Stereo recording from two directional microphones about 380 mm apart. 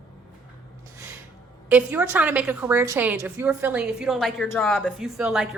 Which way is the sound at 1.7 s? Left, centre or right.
Centre.